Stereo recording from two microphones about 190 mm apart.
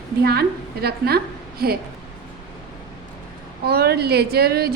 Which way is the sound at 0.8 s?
55° right (ahead or behind).